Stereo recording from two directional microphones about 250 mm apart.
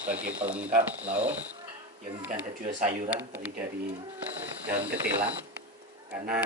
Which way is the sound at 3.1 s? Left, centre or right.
Centre.